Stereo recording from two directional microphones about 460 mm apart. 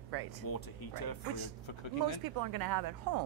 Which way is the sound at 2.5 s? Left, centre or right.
Right.